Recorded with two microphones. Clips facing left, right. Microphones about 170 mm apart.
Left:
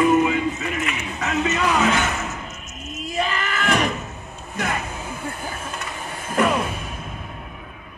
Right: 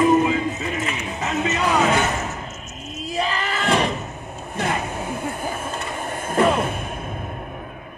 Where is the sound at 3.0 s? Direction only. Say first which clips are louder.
Right 1 dB; 35° right (ahead or behind).